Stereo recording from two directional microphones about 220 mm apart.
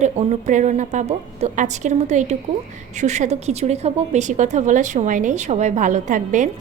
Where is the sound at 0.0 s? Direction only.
30° right (ahead or behind).